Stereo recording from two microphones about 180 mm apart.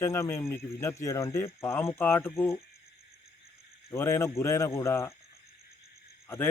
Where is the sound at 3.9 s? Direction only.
15° left (ahead or behind).